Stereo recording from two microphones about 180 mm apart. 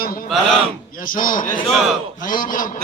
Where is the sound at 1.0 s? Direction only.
50° left (ahead or behind).